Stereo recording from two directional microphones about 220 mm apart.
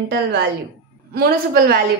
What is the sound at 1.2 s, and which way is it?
Speech, 45° right (ahead or behind).